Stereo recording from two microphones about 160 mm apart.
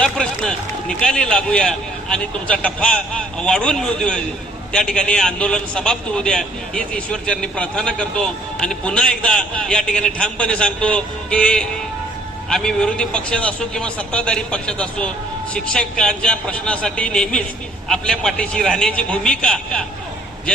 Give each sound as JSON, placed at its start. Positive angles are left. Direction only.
{"t": 0.0, "sound": "run", "side_deg": 5}
{"t": 1.0, "sound": "a man's voice", "side_deg": 5}